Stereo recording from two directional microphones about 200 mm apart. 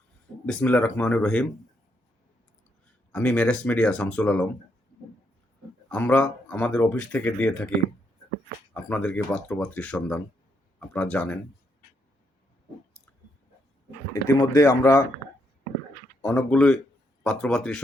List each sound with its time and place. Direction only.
0.4 s speech: 5° left (ahead or behind)
3.1 s speech: 5° left (ahead or behind)
5.9 s speech: 10° left (ahead or behind)
8.7 s speech: 5° left (ahead or behind)
14.1 s speech: 15° left (ahead or behind)
16.3 s speech: 5° left (ahead or behind)